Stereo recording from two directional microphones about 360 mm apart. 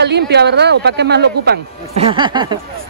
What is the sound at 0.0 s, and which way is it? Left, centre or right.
Speech, right.